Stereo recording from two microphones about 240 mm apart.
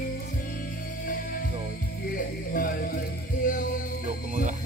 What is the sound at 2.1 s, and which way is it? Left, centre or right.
Speech, left.